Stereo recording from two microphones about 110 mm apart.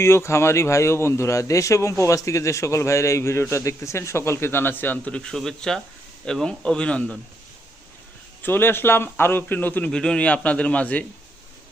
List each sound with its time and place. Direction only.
0.0 s a man's voice: 25° left (ahead or behind)
8.4 s a man's voice: 20° left (ahead or behind)